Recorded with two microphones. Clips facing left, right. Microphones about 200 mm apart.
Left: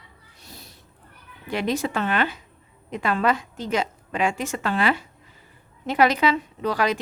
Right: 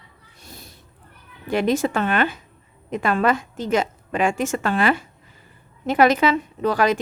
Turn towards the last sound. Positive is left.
turn(degrees=-50)  # may be behind; listen again after turning